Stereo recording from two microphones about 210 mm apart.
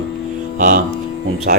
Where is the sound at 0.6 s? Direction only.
45° right (ahead or behind).